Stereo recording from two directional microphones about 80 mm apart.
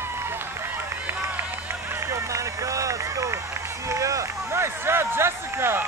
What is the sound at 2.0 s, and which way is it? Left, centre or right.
Run, right.